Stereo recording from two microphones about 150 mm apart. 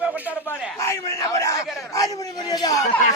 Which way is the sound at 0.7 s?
20° left (ahead or behind).